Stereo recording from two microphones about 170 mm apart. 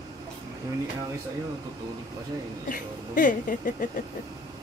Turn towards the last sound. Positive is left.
turn(degrees=50)  # may be behind; listen again after turning